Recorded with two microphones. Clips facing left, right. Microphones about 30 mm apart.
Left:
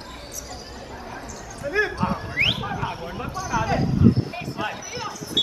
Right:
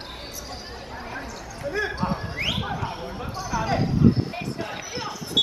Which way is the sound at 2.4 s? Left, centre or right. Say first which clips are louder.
Left 7 dB; left.